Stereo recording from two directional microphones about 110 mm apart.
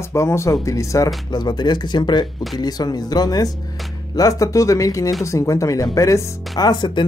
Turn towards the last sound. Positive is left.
turn(degrees=45)  # may be behind; listen again after turning